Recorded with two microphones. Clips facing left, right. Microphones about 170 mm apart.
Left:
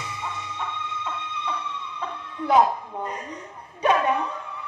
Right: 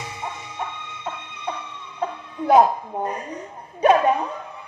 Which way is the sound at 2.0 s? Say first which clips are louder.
Right 7 dB; 45° right (ahead or behind).